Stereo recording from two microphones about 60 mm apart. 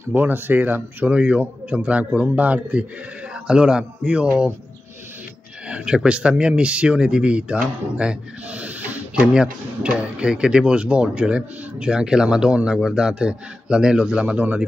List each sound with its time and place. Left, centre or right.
0.0 s a man's voice: right; by 4.3 s centre
5.7 s speech: centre